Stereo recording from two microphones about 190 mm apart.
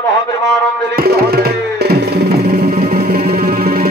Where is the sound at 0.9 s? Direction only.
55° right (ahead or behind).